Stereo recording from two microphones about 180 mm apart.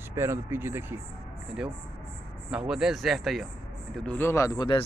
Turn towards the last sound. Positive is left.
turn(degrees=25)  # may be behind; listen again after turning